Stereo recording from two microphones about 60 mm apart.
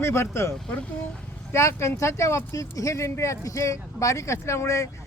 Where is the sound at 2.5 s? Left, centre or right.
Left.